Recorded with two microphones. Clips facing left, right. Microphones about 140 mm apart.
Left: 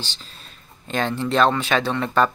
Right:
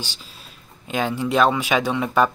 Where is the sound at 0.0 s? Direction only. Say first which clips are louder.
Right 1 dB; 10° right (ahead or behind).